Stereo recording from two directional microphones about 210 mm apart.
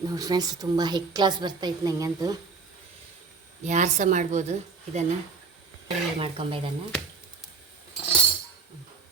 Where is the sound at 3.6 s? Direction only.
35° right (ahead or behind).